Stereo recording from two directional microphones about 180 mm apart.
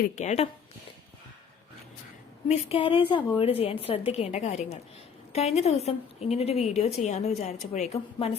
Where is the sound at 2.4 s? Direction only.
35° left (ahead or behind).